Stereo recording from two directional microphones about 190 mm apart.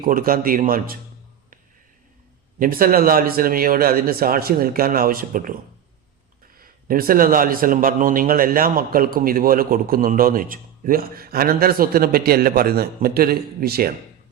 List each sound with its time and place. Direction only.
0.0 s a man's voice: 50° right (ahead or behind)
2.6 s a man's voice: 50° right (ahead or behind)
6.6 s a man's voice: 50° right (ahead or behind)